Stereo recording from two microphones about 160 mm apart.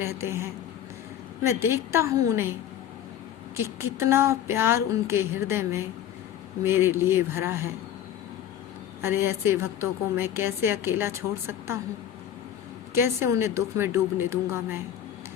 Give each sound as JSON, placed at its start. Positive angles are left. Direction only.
{"t": 0.0, "sound": "a woman's voice", "side_deg": -15}
{"t": 1.6, "sound": "a woman's voice", "side_deg": -15}
{"t": 3.6, "sound": "a woman's voice", "side_deg": -15}
{"t": 9.0, "sound": "a woman's voice", "side_deg": -15}
{"t": 12.9, "sound": "a woman's voice", "side_deg": -15}